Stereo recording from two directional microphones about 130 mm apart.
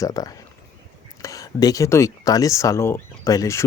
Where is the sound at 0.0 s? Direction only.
30° left (ahead or behind).